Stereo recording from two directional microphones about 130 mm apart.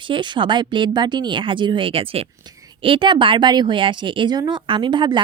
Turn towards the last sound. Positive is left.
turn(degrees=-35)  # may be behind; listen again after turning